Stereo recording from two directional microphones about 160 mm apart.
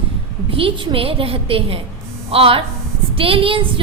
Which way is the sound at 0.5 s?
35° right (ahead or behind).